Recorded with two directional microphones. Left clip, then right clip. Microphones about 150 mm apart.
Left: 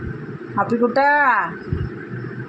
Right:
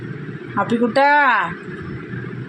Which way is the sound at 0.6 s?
20° right (ahead or behind).